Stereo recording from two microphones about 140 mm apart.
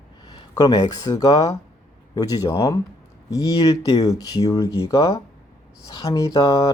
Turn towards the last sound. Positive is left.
turn(degrees=25)  # may be behind; listen again after turning